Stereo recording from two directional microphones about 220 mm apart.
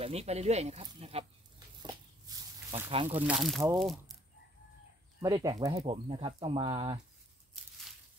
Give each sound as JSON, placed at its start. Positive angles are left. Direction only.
{"t": 0.0, "sound": "speech", "side_deg": -30}
{"t": 1.8, "sound": "a sound", "side_deg": -20}
{"t": 2.9, "sound": "speech", "side_deg": -25}
{"t": 3.3, "sound": "speech", "side_deg": 0}
{"t": 5.2, "sound": "speech", "side_deg": -15}